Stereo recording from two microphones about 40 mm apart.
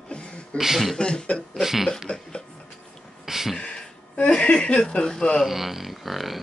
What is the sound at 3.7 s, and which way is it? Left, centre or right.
Speech, left.